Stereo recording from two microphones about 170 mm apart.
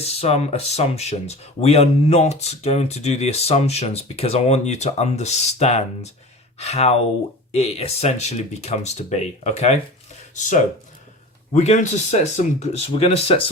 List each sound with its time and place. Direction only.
0.0 s speech: 35° left (ahead or behind)